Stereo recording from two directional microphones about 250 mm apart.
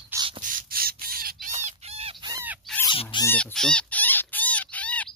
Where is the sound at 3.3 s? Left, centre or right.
Centre.